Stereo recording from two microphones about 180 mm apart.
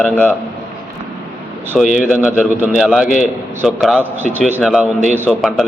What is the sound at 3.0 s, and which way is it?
Speech, 45° left (ahead or behind).